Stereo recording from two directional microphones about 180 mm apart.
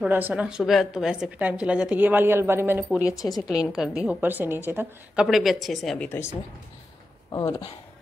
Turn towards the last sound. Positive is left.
turn(degrees=20)  # may be behind; listen again after turning